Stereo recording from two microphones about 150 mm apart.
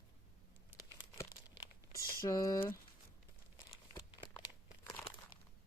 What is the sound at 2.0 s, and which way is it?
Speech, 20° left (ahead or behind).